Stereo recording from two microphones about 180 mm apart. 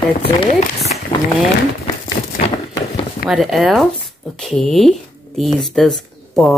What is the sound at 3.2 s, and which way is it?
Speech, centre (ahead or behind).